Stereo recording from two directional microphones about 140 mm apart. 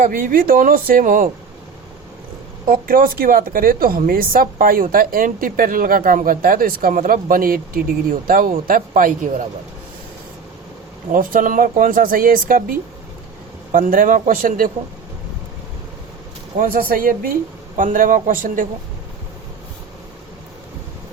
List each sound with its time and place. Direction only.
0.0 s speech: 90° right
2.6 s speech: 90° right; by 9.5 s 75° right (ahead or behind)
11.1 s speech: 80° right
13.7 s speech: 80° right
16.6 s speech: 90° right
17.7 s speech: 70° right (ahead or behind)